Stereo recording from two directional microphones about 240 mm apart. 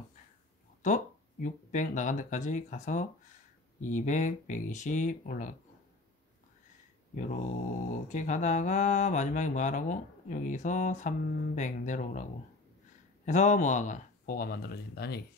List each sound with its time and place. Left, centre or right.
0.8 s speech: left
7.9 s speech: left